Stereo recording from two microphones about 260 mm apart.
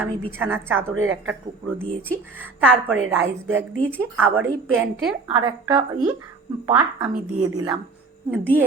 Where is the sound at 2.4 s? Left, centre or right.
Centre.